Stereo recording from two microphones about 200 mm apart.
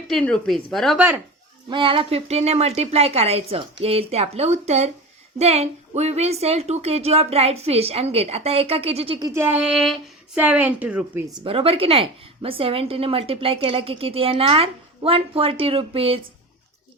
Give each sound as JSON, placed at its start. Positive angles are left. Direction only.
{"t": 0.1, "sound": "a woman's voice", "side_deg": 5}
{"t": 1.7, "sound": "speech", "side_deg": -25}
{"t": 11.3, "sound": "a woman's voice", "side_deg": -25}